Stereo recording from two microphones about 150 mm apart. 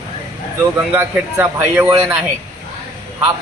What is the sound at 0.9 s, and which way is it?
Speech, 15° right (ahead or behind).